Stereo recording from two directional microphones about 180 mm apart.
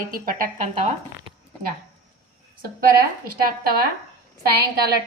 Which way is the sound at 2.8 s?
55° right (ahead or behind).